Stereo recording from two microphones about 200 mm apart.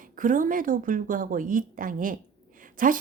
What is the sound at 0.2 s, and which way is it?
A woman's voice, 40° right (ahead or behind).